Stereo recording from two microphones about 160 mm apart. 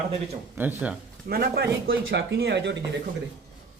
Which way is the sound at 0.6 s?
10° right (ahead or behind).